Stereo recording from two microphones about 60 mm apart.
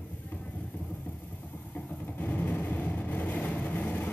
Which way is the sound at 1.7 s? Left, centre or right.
Left.